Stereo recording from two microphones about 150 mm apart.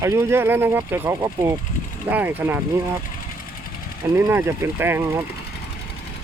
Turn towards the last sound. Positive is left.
turn(degrees=-15)  # may be behind; listen again after turning